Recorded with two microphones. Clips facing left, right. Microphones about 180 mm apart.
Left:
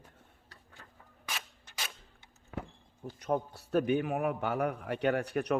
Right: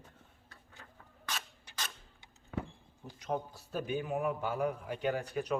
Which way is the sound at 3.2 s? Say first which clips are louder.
Left 4 dB; 60° left (ahead or behind).